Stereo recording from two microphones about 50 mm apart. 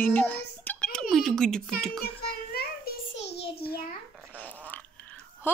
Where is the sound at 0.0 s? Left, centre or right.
Left.